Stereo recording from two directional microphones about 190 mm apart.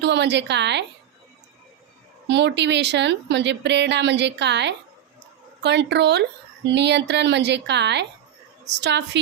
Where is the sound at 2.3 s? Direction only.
65° right (ahead or behind).